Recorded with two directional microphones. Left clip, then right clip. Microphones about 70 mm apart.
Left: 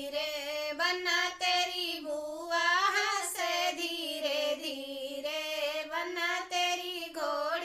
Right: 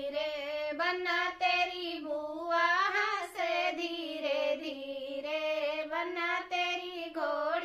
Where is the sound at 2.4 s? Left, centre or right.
Right.